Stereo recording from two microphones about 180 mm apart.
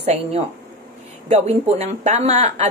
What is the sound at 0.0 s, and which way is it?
Speech, 35° right (ahead or behind).